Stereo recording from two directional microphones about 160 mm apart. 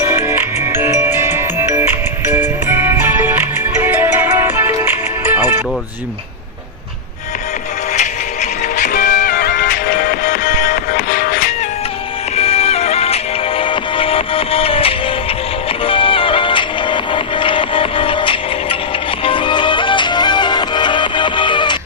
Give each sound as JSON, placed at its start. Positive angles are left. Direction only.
{"t": 0.0, "sound": "music", "side_deg": -15}
{"t": 7.9, "sound": "music", "side_deg": 45}
{"t": 9.6, "sound": "music", "side_deg": 75}
{"t": 10.2, "sound": "music", "side_deg": 50}
{"t": 12.4, "sound": "music", "side_deg": 40}